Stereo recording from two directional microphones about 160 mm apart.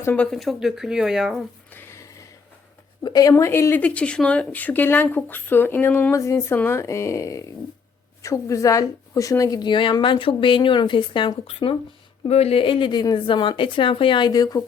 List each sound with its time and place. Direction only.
0.0 s speech: 10° left (ahead or behind)
1.7 s a sound: 15° left (ahead or behind)
3.0 s a woman's voice: 25° left (ahead or behind)